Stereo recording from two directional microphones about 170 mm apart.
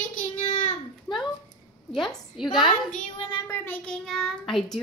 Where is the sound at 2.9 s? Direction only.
30° left (ahead or behind).